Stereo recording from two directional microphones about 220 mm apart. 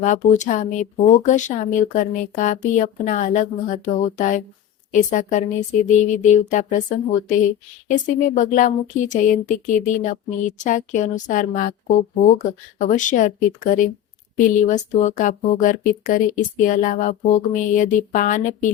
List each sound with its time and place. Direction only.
0.0 s speech: 35° left (ahead or behind)